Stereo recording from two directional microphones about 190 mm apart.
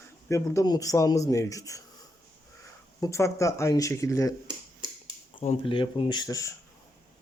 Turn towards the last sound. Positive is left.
turn(degrees=15)  # may be behind; listen again after turning